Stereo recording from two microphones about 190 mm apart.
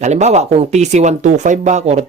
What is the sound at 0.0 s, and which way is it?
Speech, 35° right (ahead or behind).